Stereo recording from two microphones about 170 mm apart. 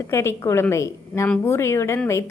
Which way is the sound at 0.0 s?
15° left (ahead or behind).